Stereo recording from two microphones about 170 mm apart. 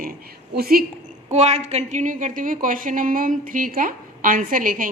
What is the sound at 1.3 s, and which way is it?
A woman's voice, 40° right (ahead or behind).